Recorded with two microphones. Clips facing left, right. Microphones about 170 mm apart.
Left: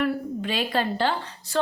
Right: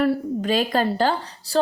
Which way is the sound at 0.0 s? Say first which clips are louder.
Right 5 dB; 40° right (ahead or behind).